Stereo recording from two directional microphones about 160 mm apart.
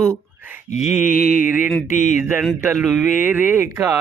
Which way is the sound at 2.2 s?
10° right (ahead or behind).